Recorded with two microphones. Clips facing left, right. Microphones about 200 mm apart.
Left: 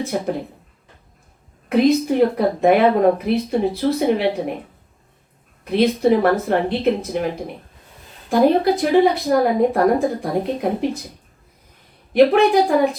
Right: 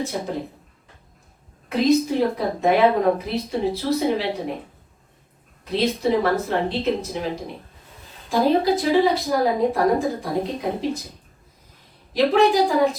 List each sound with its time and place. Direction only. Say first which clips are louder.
0.1 s speech: left 5 dB; 65° left (ahead or behind)
1.7 s speech: left 3 dB; 60° left (ahead or behind)
5.7 s speech: left 5 dB; 55° left (ahead or behind)
12.1 s speech: left 4 dB; 60° left (ahead or behind)